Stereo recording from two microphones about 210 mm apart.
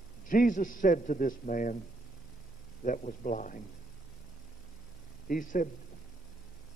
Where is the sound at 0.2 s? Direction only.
40° left (ahead or behind).